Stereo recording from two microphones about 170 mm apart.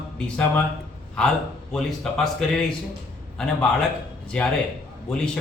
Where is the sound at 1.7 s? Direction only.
Centre (ahead or behind).